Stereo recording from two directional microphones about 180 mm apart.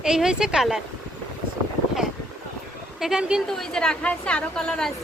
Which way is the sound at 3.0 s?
5° right (ahead or behind).